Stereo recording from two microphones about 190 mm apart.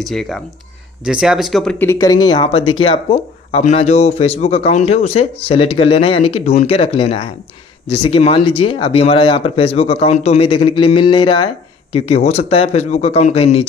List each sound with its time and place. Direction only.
0.0 s speech: centre (ahead or behind); by 13.7 s 30° left (ahead or behind)